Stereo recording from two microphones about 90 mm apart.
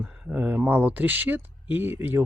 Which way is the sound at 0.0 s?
15° right (ahead or behind).